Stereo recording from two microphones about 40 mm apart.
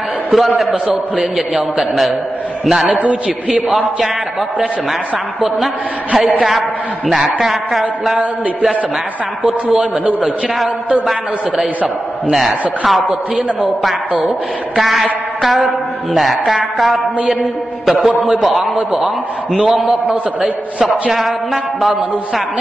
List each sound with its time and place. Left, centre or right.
0.3 s music: centre
1.1 s a man's voice: centre
7.1 s music: centre
9.4 s a man's voice: centre
12.3 s music: centre
13.1 s a man's voice: centre
13.8 s music: centre
16.1 s music: centre
17.8 s a man's voice: centre
18.4 s music: centre
18.8 s a man's voice: centre